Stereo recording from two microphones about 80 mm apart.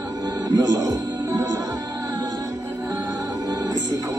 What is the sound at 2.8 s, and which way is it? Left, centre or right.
Music, right.